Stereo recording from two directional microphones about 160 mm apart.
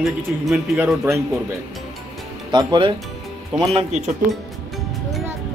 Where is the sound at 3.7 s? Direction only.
45° right (ahead or behind).